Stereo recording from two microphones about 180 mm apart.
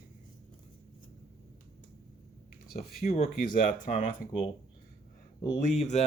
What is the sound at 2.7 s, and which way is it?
Speech, 55° left (ahead or behind).